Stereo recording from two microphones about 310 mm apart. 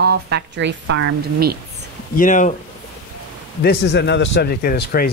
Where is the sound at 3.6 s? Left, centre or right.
Left.